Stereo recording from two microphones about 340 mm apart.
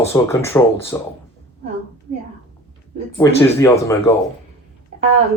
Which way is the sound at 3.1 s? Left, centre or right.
Centre.